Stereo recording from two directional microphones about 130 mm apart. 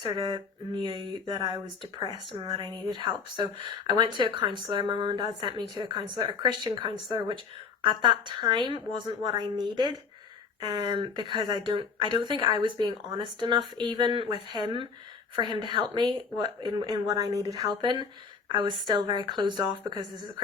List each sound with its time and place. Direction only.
0.0 s a woman's voice: 35° right (ahead or behind)